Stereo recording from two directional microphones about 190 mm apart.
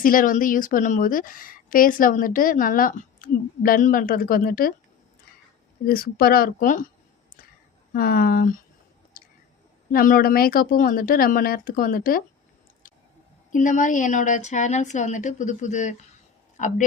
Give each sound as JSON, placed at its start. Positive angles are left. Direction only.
{"t": 0.0, "sound": "a woman's voice", "side_deg": 45}
{"t": 5.8, "sound": "a woman's voice", "side_deg": 50}
{"t": 7.9, "sound": "a woman's voice", "side_deg": 50}
{"t": 9.2, "sound": "a sound", "side_deg": 50}
{"t": 9.9, "sound": "a woman's voice", "side_deg": 50}
{"t": 13.5, "sound": "a woman's voice", "side_deg": 40}